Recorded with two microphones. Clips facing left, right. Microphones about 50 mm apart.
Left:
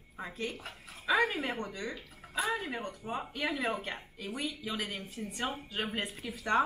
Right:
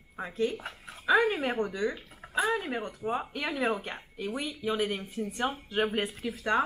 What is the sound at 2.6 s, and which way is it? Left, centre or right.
Speech, centre.